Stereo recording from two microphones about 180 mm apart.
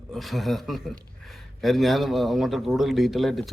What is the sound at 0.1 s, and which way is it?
Speech, centre (ahead or behind).